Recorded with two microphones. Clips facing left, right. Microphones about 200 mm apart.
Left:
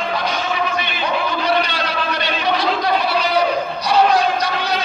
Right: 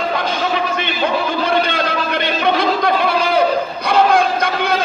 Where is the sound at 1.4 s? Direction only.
50° right (ahead or behind).